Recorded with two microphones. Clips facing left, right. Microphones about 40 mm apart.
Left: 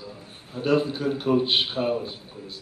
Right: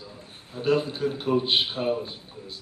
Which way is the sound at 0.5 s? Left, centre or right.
Centre.